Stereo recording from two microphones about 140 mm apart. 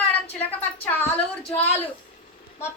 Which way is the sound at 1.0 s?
45° left (ahead or behind).